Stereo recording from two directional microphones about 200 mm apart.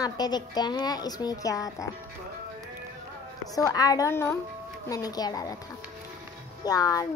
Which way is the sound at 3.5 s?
20° left (ahead or behind).